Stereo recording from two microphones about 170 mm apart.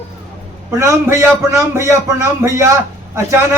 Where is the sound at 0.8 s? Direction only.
15° right (ahead or behind).